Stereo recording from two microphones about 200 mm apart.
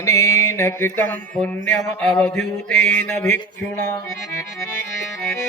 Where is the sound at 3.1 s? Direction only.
10° left (ahead or behind).